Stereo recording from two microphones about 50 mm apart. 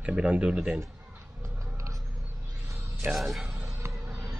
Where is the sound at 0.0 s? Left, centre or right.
Right.